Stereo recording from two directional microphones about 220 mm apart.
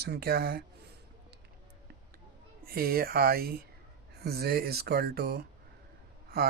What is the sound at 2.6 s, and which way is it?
Speech, 45° right (ahead or behind).